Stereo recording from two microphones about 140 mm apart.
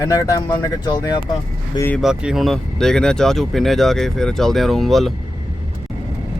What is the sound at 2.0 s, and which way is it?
Speech, 5° right (ahead or behind).